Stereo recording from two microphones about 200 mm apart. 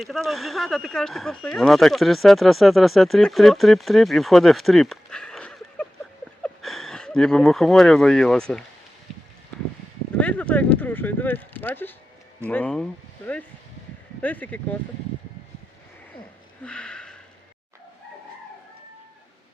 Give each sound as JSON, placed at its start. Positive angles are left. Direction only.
{"t": 0.0, "sound": "speech", "side_deg": 0}
{"t": 10.2, "sound": "speech", "side_deg": 5}
{"t": 16.6, "sound": "a sound", "side_deg": 5}